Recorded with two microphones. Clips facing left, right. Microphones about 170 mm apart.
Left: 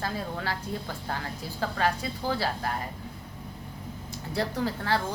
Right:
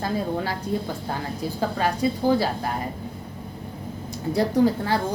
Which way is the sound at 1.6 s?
15° right (ahead or behind).